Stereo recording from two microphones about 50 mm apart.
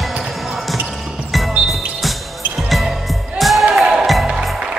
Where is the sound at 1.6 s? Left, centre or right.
Centre.